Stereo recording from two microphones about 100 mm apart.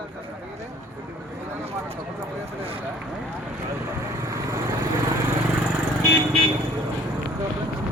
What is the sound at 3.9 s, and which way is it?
Vehicle, 30° right (ahead or behind).